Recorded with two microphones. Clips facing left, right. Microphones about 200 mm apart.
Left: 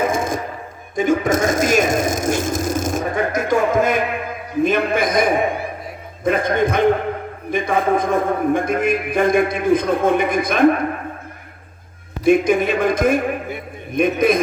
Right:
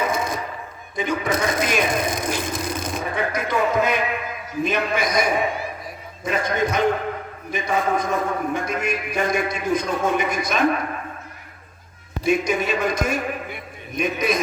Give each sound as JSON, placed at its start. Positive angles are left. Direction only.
{"t": 0.0, "sound": "music", "side_deg": 50}
{"t": 0.9, "sound": "a sound", "side_deg": 45}
{"t": 4.6, "sound": "a man's voice", "side_deg": 50}
{"t": 12.2, "sound": "a man's voice", "side_deg": 55}